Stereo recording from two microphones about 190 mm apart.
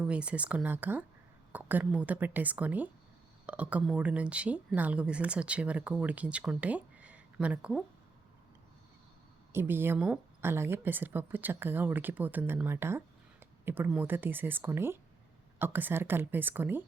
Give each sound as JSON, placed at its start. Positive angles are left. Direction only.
{"t": 0.0, "sound": "speech", "side_deg": -5}
{"t": 9.5, "sound": "speech", "side_deg": -10}